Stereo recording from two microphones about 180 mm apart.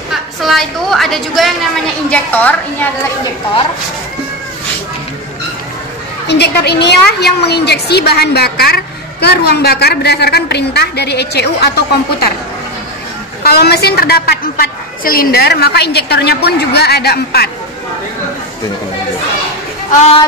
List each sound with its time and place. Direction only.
0.4 s a woman's voice: centre (ahead or behind)
6.2 s a woman's voice: 70° left (ahead or behind)
13.4 s a woman's voice: 60° left (ahead or behind)
19.9 s speech: 40° left (ahead or behind)